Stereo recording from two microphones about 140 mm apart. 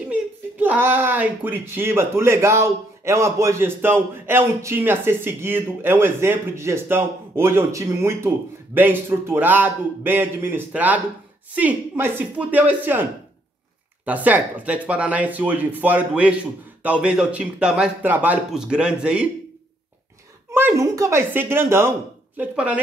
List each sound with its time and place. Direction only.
0.1 s speech: 10° right (ahead or behind)
20.5 s speech: 20° right (ahead or behind)